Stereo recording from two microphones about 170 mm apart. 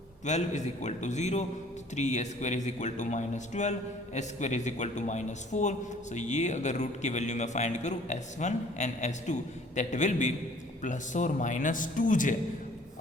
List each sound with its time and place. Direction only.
0.3 s a man's voice: 45° left (ahead or behind)